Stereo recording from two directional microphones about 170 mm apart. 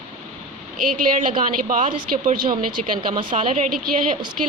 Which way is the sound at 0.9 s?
50° right (ahead or behind).